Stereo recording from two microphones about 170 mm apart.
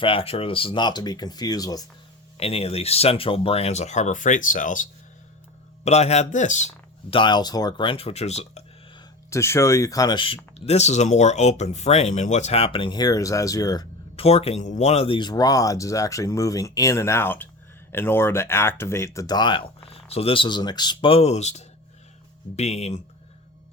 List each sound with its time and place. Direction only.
0.0 s speech: 35° left (ahead or behind)
2.4 s speech: 35° left (ahead or behind)
7.2 s speech: 25° left (ahead or behind)
9.3 s speech: 15° left (ahead or behind)
14.2 s speech: 35° left (ahead or behind)